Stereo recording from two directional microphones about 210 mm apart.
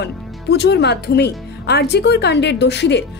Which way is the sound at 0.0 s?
55° left (ahead or behind).